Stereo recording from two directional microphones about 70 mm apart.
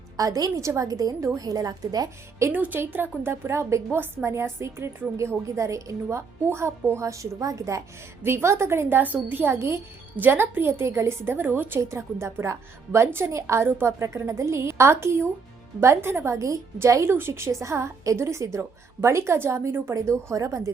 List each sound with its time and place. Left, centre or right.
0.2 s a woman's voice: right
0.9 s a woman's voice: right
1.2 s a woman's voice: right
2.5 s a woman's voice: right
11.8 s a woman's voice: right